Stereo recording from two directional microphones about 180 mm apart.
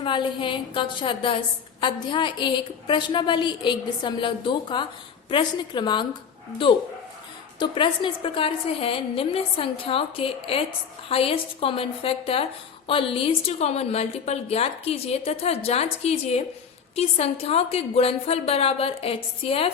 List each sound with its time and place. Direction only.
0.0 s a woman's voice: 25° left (ahead or behind)
7.6 s a woman's voice: 25° left (ahead or behind)